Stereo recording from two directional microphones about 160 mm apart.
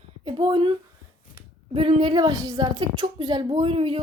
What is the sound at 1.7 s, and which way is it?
A woman's voice, 35° right (ahead or behind).